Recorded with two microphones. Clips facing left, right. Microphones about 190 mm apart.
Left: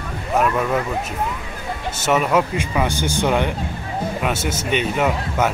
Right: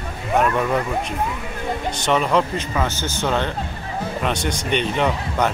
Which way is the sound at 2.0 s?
5° left (ahead or behind).